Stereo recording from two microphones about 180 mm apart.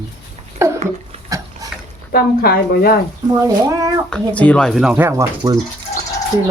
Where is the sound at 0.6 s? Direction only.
15° right (ahead or behind).